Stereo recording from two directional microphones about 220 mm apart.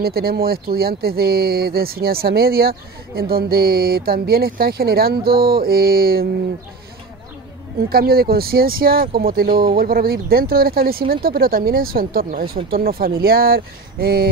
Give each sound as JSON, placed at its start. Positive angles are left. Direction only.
{"t": 0.0, "sound": "speech", "side_deg": -45}
{"t": 7.9, "sound": "speech", "side_deg": -45}